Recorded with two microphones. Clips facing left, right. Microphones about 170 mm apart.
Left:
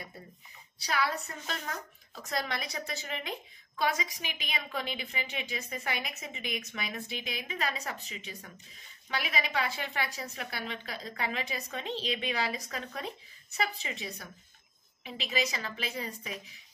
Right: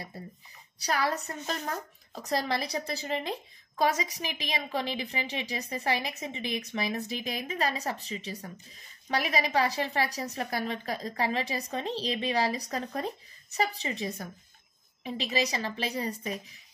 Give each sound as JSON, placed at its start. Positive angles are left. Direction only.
{"t": 0.7, "sound": "a woman's voice", "side_deg": -40}